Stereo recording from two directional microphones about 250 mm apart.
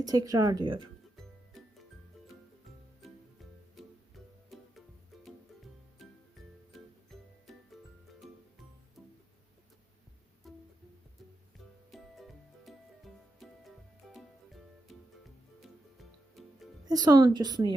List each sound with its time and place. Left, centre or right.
0.0 s a woman's voice: centre
3.8 s music: centre
6.7 s music: centre
10.4 s music: centre
11.9 s music: centre
16.8 s a woman's voice: centre